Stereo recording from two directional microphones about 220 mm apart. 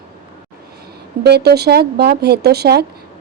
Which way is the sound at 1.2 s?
45° right (ahead or behind).